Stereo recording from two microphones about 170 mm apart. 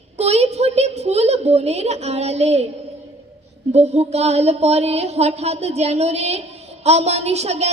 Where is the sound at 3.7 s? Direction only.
40° right (ahead or behind).